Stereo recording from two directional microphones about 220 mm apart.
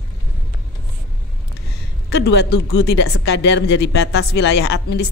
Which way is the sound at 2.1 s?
50° left (ahead or behind).